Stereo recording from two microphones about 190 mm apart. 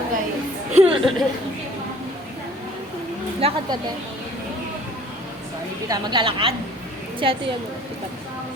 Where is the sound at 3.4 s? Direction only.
30° right (ahead or behind).